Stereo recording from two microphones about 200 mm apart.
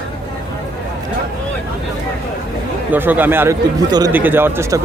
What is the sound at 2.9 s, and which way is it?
A man's voice, 10° right (ahead or behind).